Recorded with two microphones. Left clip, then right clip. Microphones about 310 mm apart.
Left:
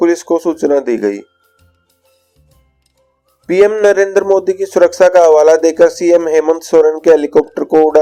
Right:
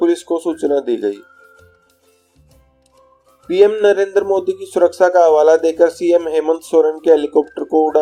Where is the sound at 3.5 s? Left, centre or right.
Left.